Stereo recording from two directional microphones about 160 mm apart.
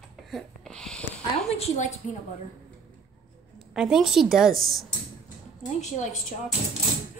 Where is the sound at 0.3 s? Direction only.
5° left (ahead or behind).